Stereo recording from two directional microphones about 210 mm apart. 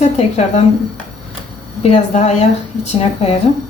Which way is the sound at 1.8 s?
30° left (ahead or behind).